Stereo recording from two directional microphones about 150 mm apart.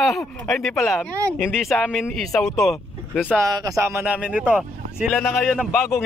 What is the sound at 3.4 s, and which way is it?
Speech, 25° right (ahead or behind).